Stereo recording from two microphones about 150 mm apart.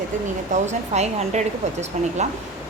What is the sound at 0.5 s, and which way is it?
Speech, 50° right (ahead or behind).